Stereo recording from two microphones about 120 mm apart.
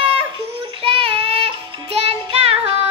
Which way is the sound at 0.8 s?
50° right (ahead or behind).